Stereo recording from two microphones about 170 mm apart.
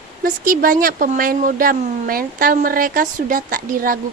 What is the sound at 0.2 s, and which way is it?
Speech, 55° right (ahead or behind).